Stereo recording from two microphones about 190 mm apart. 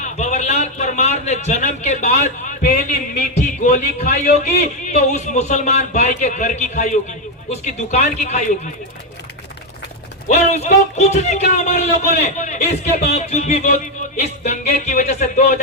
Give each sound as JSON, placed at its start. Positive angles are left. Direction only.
{"t": 0.0, "sound": "a sound", "side_deg": 40}
{"t": 2.2, "sound": "a man's voice", "side_deg": 45}
{"t": 4.4, "sound": "a man's voice", "side_deg": 35}
{"t": 10.2, "sound": "a man's voice", "side_deg": 35}